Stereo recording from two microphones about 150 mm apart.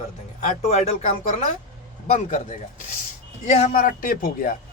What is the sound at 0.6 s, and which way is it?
A man's voice, 50° left (ahead or behind).